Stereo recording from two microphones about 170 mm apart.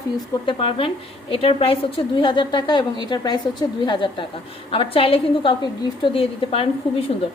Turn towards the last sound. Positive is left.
turn(degrees=35)  # may be behind; listen again after turning